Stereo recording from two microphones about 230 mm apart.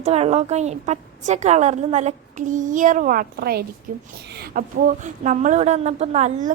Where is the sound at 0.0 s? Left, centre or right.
Right.